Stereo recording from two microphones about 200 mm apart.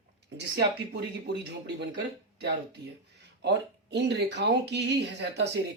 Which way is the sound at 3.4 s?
60° right (ahead or behind).